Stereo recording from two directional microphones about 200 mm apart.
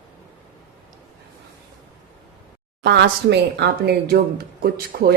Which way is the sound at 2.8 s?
60° right (ahead or behind).